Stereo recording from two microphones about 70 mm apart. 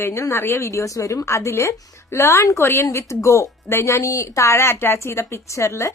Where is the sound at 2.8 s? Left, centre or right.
Left.